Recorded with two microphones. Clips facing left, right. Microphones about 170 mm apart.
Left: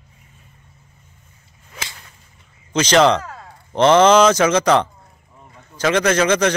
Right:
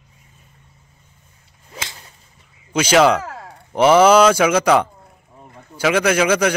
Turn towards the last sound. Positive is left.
turn(degrees=-10)  # may be behind; listen again after turning